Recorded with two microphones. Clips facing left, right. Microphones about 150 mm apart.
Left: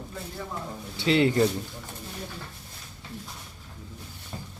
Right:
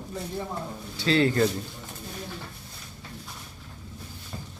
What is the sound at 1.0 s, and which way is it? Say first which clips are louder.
Speech: left 1 dB; 20° left (ahead or behind).